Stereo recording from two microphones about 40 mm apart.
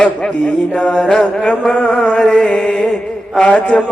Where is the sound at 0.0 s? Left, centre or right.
Centre.